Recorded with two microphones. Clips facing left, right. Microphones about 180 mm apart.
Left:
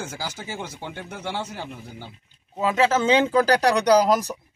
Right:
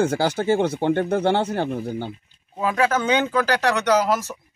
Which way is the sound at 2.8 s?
25° left (ahead or behind).